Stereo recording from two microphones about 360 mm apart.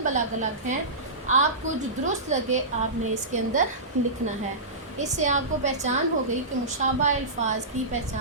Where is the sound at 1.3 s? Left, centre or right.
Centre.